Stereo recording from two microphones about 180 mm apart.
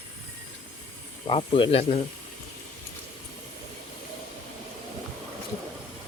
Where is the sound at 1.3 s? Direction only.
30° left (ahead or behind).